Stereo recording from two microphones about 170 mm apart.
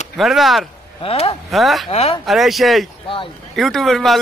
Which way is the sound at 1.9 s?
35° left (ahead or behind).